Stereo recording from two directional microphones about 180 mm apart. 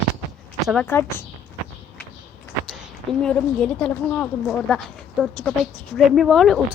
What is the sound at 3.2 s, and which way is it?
Speech, 5° left (ahead or behind).